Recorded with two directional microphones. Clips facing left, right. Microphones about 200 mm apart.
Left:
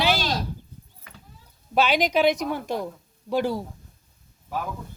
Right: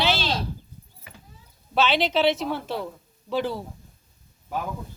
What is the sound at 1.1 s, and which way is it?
Horse, 10° right (ahead or behind).